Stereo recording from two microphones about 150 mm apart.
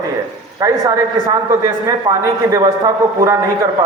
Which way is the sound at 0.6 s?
20° right (ahead or behind).